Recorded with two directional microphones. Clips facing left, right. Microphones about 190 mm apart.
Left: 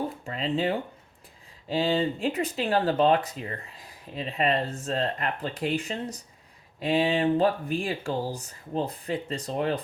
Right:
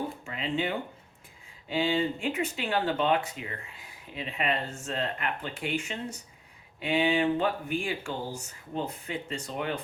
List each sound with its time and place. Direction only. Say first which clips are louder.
0.3 s speech: left 5 dB; 35° left (ahead or behind)